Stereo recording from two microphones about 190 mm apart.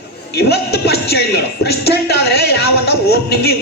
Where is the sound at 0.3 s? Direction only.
60° left (ahead or behind).